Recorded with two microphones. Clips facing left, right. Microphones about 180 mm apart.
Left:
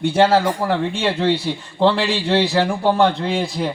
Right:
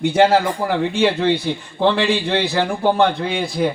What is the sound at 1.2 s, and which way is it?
Speech, 60° right (ahead or behind).